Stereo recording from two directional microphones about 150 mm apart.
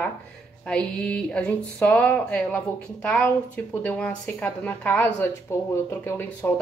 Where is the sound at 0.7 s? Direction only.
5° left (ahead or behind).